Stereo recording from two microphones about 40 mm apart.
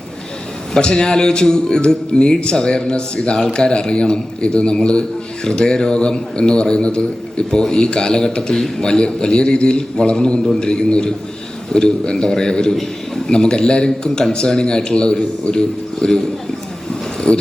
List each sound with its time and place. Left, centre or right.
0.8 s a man's voice: centre
17.3 s a man's voice: left